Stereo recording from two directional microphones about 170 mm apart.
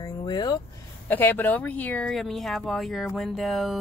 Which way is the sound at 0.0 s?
25° left (ahead or behind).